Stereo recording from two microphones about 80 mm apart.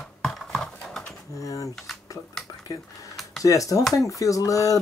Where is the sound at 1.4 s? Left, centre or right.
Left.